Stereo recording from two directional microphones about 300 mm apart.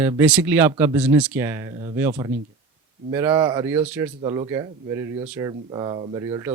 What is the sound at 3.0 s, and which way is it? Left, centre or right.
Speech, centre.